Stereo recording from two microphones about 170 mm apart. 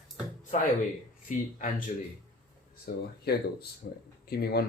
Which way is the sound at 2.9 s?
65° left (ahead or behind).